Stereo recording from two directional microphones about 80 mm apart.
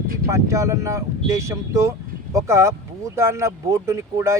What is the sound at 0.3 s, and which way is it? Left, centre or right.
Speech, right.